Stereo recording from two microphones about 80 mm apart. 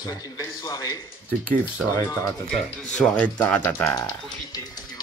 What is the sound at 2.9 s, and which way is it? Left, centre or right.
Speech, centre.